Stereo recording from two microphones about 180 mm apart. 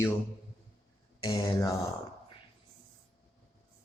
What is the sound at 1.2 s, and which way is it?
Speech, 15° left (ahead or behind).